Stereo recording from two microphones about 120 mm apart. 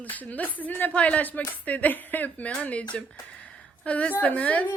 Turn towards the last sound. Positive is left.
turn(degrees=10)  # may be behind; listen again after turning